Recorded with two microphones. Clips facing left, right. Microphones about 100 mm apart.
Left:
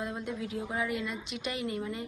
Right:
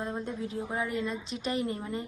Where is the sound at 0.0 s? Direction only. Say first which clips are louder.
Right 1 dB; 30° right (ahead or behind).